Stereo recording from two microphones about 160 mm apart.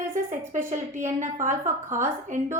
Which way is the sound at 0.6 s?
15° right (ahead or behind).